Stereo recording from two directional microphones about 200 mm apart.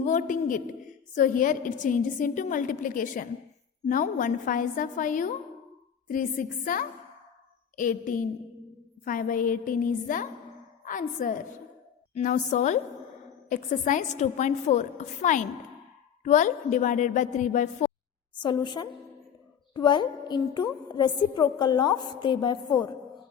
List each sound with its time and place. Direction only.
0.0 s a woman's voice: 40° left (ahead or behind)
6.4 s a woman's voice: 45° left (ahead or behind)
7.8 s a woman's voice: 40° left (ahead or behind)
18.3 s a woman's voice: 20° left (ahead or behind)